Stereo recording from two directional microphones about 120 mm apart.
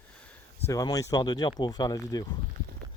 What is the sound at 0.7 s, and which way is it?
Speech, 30° left (ahead or behind).